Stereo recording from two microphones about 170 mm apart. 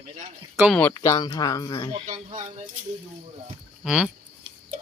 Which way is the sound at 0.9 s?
20° left (ahead or behind).